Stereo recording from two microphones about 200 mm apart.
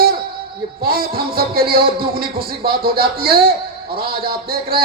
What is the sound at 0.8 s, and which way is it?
Music, 50° right (ahead or behind).